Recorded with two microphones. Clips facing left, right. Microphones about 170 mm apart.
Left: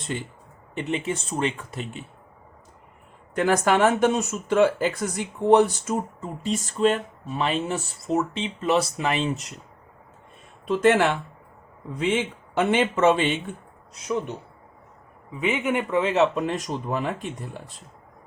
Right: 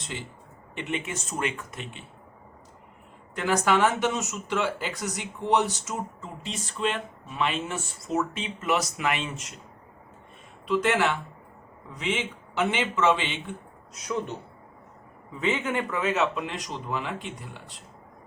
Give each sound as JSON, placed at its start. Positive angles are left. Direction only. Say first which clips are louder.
{"t": 0.8, "sound": "speech", "louder": "left 5 dB", "side_deg": 35}
{"t": 3.3, "sound": "speech", "louder": "left 3 dB", "side_deg": 50}
{"t": 10.7, "sound": "speech", "louder": "left 5 dB", "side_deg": 50}
{"t": 15.4, "sound": "speech", "louder": "left 3 dB", "side_deg": 15}